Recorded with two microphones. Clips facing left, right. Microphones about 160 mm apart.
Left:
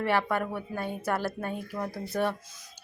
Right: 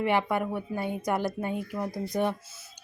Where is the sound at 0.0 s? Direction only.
15° right (ahead or behind).